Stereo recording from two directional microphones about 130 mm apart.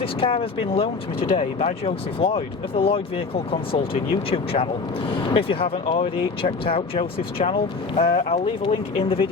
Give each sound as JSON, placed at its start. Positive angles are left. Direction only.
{"t": 0.0, "sound": "speech", "side_deg": 45}